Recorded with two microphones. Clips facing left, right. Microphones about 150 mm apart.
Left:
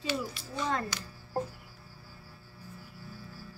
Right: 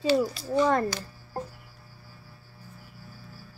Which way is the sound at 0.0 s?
35° right (ahead or behind).